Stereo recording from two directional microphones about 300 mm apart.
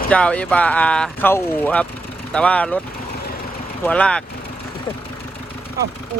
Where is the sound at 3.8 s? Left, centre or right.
Centre.